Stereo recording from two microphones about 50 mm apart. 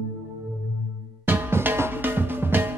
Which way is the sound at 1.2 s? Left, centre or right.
Right.